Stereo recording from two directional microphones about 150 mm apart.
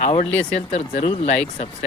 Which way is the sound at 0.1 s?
45° left (ahead or behind).